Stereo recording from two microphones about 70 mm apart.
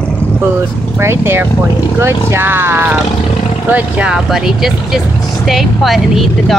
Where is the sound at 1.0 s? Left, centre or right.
Right.